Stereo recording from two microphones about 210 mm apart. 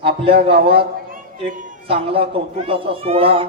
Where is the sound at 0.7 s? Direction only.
50° right (ahead or behind).